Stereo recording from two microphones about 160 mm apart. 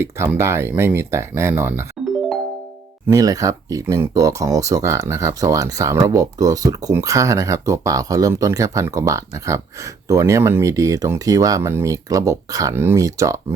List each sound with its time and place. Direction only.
0.0 s speech: 15° right (ahead or behind)
3.1 s speech: 20° right (ahead or behind)